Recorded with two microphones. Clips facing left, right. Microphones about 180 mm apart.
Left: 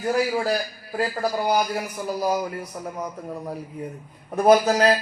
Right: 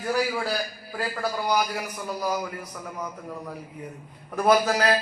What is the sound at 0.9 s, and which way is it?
A man's voice, 30° left (ahead or behind).